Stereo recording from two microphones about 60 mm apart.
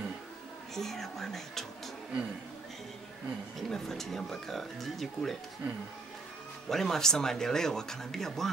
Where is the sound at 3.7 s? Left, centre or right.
Centre.